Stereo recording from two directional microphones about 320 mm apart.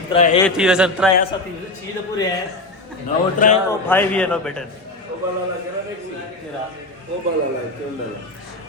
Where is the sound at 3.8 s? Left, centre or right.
Centre.